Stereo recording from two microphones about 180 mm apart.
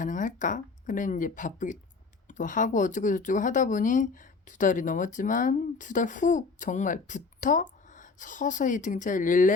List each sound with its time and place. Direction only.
0.0 s speech: 45° left (ahead or behind)